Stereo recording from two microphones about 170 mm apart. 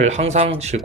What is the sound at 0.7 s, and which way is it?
Speech, 55° right (ahead or behind).